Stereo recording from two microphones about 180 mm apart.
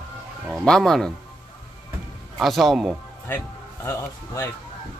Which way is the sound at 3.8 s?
15° left (ahead or behind).